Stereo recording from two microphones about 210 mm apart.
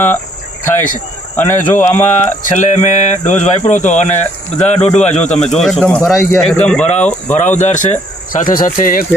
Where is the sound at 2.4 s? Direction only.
35° left (ahead or behind).